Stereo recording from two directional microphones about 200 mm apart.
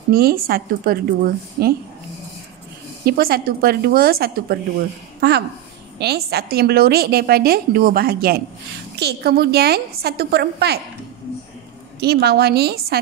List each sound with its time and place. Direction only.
0.1 s a woman's voice: 50° right (ahead or behind)
3.1 s a woman's voice: 50° right (ahead or behind)
5.9 s a woman's voice: 55° right (ahead or behind)
12.0 s a woman's voice: 55° right (ahead or behind)